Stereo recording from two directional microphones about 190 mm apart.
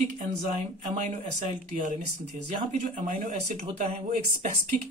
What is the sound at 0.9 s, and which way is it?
Speech, 40° right (ahead or behind).